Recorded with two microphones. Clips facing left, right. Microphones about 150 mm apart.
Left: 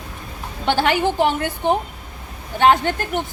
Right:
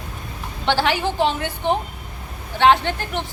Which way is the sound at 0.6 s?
50° left (ahead or behind).